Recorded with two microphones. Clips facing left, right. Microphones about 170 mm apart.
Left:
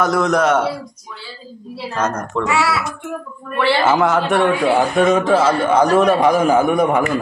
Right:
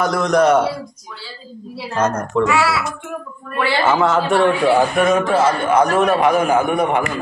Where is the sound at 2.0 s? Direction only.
Centre (ahead or behind).